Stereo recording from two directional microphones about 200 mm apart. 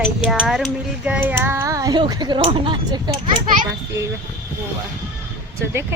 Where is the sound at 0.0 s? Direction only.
5° right (ahead or behind); by 3.3 s 25° right (ahead or behind).